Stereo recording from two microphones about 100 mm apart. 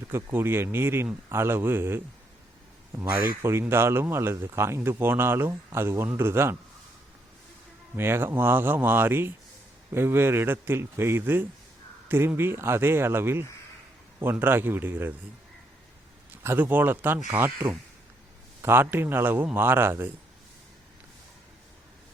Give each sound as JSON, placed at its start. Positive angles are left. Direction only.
{"t": 0.1, "sound": "speech", "side_deg": -25}
{"t": 3.6, "sound": "speech", "side_deg": -25}
{"t": 7.9, "sound": "speech", "side_deg": -25}
{"t": 16.4, "sound": "speech", "side_deg": -20}